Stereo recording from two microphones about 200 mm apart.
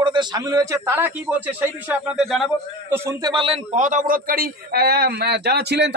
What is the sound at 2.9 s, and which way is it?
Speech, 15° right (ahead or behind).